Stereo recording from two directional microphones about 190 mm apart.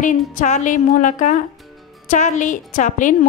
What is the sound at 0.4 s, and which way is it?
A woman's voice, 40° left (ahead or behind).